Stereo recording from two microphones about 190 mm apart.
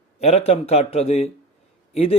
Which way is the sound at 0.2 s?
35° left (ahead or behind).